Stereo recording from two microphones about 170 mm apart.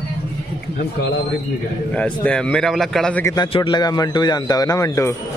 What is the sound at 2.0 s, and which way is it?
A man's voice, 5° left (ahead or behind).